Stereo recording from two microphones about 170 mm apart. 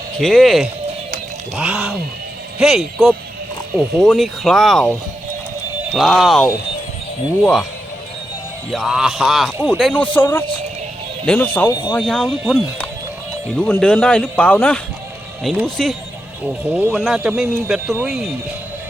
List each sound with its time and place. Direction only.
0.2 s speech: centre (ahead or behind)
5.9 s speech: centre (ahead or behind)
8.7 s a man's voice: 5° right (ahead or behind)
11.7 s speech: 30° left (ahead or behind)
11.9 s a man's voice: 5° left (ahead or behind)
16.7 s speech: 10° right (ahead or behind)